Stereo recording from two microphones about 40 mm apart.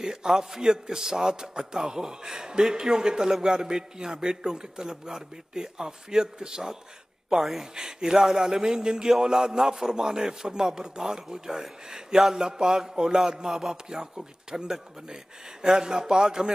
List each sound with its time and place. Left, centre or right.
0.0 s a man's voice: centre
3.5 s a man's voice: centre